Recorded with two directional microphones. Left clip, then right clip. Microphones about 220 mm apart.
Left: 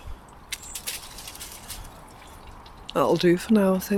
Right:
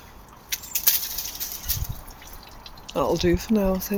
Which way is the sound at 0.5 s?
20° right (ahead or behind).